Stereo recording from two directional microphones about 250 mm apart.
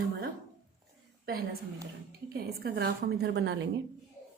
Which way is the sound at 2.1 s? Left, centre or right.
Right.